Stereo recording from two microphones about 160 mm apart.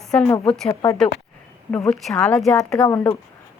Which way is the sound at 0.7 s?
20° left (ahead or behind).